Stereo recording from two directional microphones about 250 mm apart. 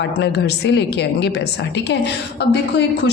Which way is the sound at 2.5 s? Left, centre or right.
Left.